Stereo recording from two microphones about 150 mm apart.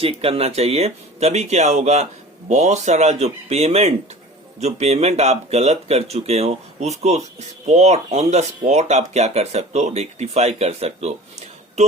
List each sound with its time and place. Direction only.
0.0 s speech: 40° right (ahead or behind)